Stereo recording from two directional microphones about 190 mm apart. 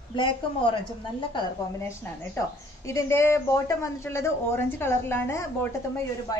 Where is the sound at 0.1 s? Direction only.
25° left (ahead or behind).